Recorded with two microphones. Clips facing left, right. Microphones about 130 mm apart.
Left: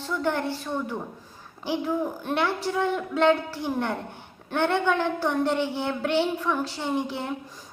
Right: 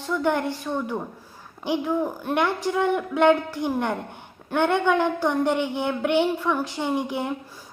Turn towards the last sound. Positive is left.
turn(degrees=-15)  # may be behind; listen again after turning